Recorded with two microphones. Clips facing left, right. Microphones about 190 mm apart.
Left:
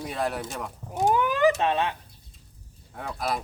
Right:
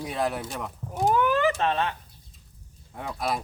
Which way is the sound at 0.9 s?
15° left (ahead or behind).